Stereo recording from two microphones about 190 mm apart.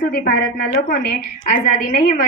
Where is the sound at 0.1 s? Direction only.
55° left (ahead or behind).